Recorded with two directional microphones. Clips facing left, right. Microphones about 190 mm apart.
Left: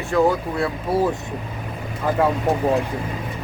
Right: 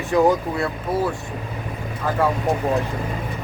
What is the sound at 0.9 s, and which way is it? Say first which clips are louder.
Speech: left 3 dB; 10° left (ahead or behind).